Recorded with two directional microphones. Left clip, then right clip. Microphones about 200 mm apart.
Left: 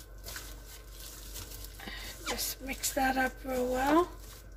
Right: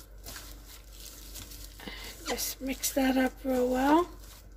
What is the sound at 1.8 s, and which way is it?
Speech, 35° right (ahead or behind).